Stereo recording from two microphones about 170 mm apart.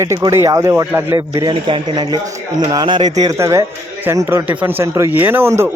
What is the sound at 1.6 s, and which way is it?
Speech, 25° right (ahead or behind).